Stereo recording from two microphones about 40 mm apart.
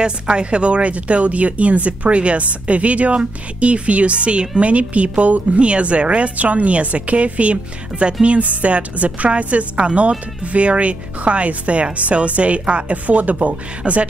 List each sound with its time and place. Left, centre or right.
0.0 s speech: right